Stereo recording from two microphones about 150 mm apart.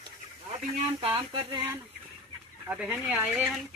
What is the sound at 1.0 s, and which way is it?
Speech, 30° right (ahead or behind).